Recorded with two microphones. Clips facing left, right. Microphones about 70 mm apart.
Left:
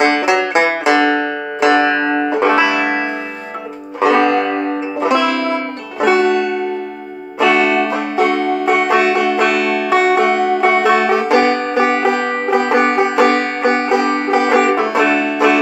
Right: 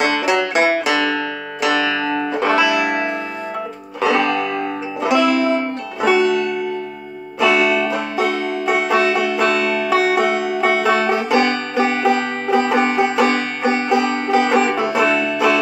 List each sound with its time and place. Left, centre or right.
0.0 s banjo: left
1.6 s music: left
4.0 s music: left
6.2 s banjo: left
7.3 s music: left
15.0 s banjo: left